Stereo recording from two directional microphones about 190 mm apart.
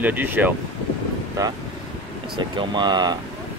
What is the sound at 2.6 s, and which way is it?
Speech, 25° right (ahead or behind).